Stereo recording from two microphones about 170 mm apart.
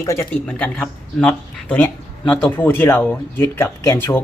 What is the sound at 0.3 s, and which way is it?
Speech, 5° left (ahead or behind).